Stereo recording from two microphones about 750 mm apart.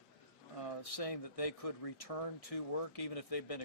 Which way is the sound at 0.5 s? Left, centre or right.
Left.